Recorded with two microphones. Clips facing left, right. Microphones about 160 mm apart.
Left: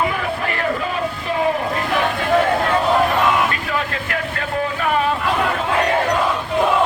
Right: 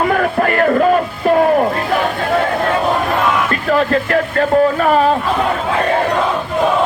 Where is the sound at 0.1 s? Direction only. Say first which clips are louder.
Right 8 dB; 55° right (ahead or behind).